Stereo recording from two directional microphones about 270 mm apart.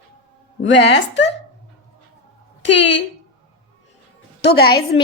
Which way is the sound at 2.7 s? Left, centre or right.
Left.